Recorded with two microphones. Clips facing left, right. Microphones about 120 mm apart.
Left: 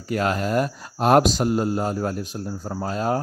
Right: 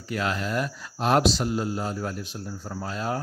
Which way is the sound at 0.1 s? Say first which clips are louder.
Left 5 dB; 45° left (ahead or behind).